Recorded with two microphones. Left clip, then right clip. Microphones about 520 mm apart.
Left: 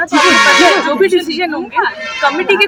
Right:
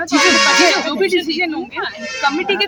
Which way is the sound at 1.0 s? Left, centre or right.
Right.